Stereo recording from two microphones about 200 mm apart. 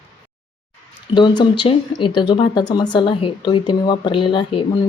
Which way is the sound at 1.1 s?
20° left (ahead or behind).